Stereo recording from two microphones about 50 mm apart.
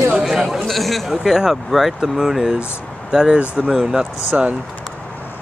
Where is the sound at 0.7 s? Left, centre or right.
Centre.